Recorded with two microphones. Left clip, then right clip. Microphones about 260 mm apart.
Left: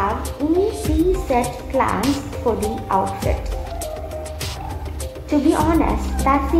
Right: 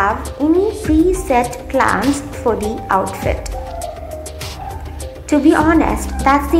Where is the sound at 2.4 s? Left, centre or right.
Centre.